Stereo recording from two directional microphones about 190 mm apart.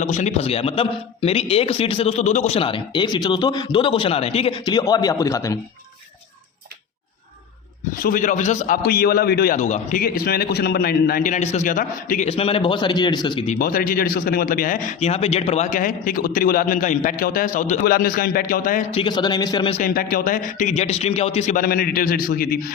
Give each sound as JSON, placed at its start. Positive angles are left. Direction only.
{"t": 0.0, "sound": "a man's voice", "side_deg": 40}
{"t": 8.0, "sound": "a man's voice", "side_deg": 45}
{"t": 13.5, "sound": "a man's voice", "side_deg": 50}
{"t": 18.9, "sound": "a man's voice", "side_deg": 25}
{"t": 19.8, "sound": "a man's voice", "side_deg": 50}
{"t": 21.6, "sound": "a man's voice", "side_deg": 50}